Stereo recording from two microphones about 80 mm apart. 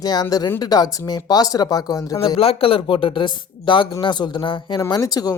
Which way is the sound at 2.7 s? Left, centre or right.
Left.